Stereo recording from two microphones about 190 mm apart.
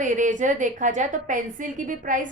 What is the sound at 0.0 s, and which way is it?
A woman's voice, 40° right (ahead or behind).